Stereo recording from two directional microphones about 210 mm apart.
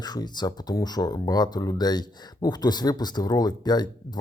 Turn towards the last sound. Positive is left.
turn(degrees=20)  # may be behind; listen again after turning